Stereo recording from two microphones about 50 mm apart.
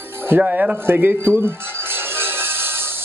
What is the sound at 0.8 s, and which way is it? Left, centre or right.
Music, right.